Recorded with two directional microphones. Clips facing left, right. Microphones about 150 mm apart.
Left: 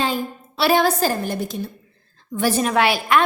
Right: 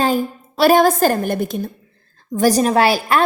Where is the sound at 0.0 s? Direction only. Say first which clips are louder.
Right 5 dB; 45° right (ahead or behind).